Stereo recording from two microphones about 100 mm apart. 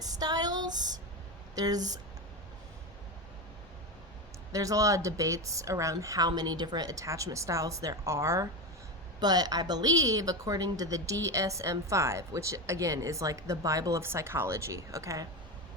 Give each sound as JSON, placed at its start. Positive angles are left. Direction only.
{"t": 0.0, "sound": "a sound", "side_deg": -40}
{"t": 1.5, "sound": "a woman's voice", "side_deg": -40}
{"t": 4.5, "sound": "a woman's voice", "side_deg": -35}
{"t": 9.2, "sound": "a woman's voice", "side_deg": -40}